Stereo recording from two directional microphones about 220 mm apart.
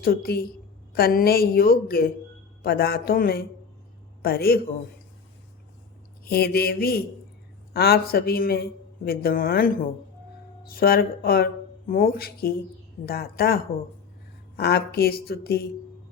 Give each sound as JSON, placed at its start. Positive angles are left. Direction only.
{"t": 0.0, "sound": "a man's voice", "side_deg": 45}
{"t": 6.2, "sound": "speech", "side_deg": 45}